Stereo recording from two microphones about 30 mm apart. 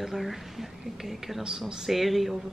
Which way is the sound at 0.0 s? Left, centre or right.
Centre.